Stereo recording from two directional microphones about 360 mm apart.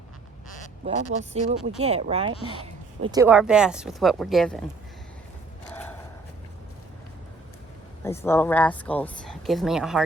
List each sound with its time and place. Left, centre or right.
0.9 s speech: centre
8.0 s speech: centre